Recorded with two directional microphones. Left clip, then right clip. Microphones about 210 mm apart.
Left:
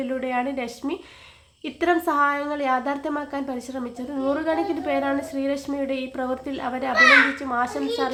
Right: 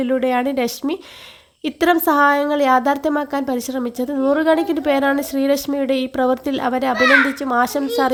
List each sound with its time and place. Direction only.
0.0 s a woman's voice: 45° right (ahead or behind)